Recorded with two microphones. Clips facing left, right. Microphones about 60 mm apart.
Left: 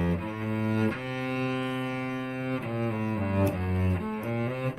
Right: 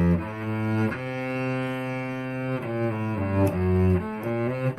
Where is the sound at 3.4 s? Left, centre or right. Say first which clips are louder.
Right 8 dB; right.